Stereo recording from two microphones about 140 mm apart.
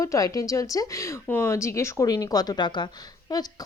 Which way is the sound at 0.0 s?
25° left (ahead or behind).